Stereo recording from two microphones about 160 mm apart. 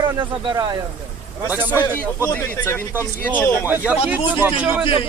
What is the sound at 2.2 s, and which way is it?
Speech, 15° left (ahead or behind).